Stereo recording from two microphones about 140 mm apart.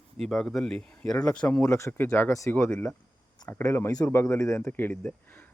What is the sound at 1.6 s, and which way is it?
Speech, 20° left (ahead or behind).